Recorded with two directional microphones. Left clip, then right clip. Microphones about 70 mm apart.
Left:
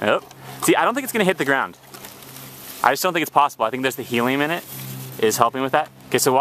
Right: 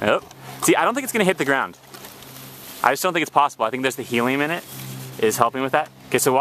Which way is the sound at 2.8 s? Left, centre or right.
Centre.